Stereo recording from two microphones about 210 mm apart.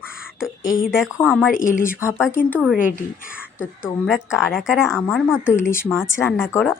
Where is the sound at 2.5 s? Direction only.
Centre (ahead or behind).